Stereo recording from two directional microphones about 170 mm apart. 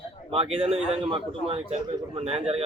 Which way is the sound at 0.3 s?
35° right (ahead or behind).